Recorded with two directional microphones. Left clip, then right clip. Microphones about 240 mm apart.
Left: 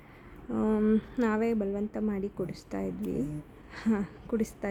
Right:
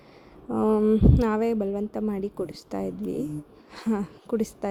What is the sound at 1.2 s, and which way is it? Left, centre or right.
A woman's voice, centre.